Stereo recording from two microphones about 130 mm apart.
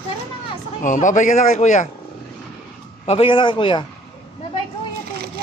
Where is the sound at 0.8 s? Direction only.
75° left (ahead or behind).